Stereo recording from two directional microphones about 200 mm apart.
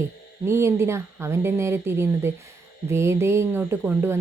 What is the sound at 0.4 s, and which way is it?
Speech, 15° right (ahead or behind).